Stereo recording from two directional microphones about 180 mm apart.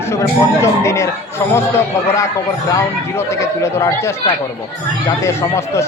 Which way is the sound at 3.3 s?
15° left (ahead or behind).